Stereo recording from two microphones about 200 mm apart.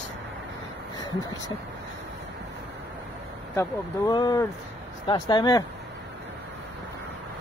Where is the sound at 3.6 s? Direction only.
20° left (ahead or behind).